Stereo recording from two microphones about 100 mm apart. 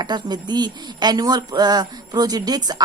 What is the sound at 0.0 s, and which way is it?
Speech, 45° right (ahead or behind).